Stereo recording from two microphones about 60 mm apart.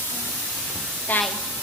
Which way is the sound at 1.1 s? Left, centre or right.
Left.